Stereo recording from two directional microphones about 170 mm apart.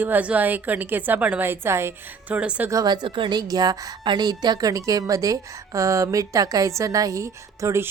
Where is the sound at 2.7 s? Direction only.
20° right (ahead or behind).